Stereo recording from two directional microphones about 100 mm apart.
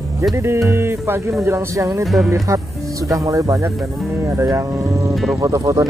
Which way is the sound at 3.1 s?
30° right (ahead or behind).